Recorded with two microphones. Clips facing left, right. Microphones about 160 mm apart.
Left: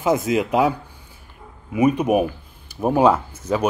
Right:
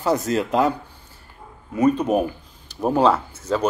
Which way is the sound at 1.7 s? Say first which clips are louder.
Left 1 dB; 10° left (ahead or behind).